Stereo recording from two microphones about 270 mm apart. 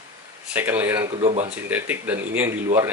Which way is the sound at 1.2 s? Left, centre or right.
Right.